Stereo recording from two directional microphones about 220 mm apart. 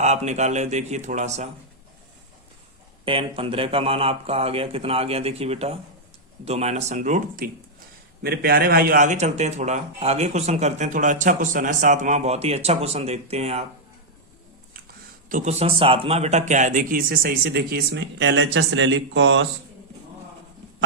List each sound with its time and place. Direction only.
0.0 s speech: 30° right (ahead or behind)
3.0 s speech: 25° right (ahead or behind)
15.3 s speech: 30° right (ahead or behind); by 19.5 s 55° right (ahead or behind)